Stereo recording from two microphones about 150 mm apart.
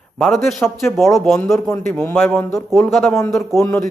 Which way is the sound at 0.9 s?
15° left (ahead or behind).